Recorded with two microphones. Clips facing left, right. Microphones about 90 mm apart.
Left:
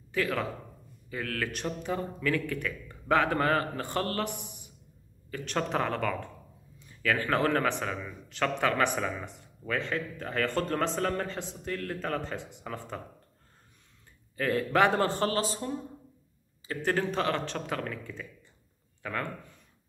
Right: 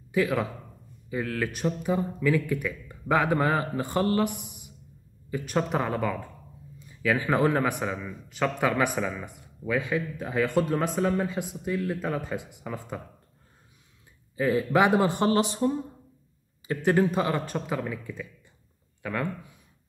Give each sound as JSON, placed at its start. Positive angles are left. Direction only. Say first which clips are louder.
{"t": 0.1, "sound": "a man's voice", "louder": "right 4 dB", "side_deg": -15}
{"t": 4.3, "sound": "a man's voice", "louder": "even", "side_deg": -55}
{"t": 5.3, "sound": "a man's voice", "louder": "right 4 dB", "side_deg": -10}
{"t": 14.3, "sound": "speech", "louder": "right 4 dB", "side_deg": -5}
{"t": 19.0, "sound": "speech", "louder": "right 4 dB", "side_deg": -10}